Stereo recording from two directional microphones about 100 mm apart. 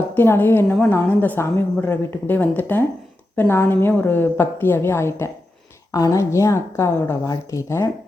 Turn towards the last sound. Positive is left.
turn(degrees=30)  # may be behind; listen again after turning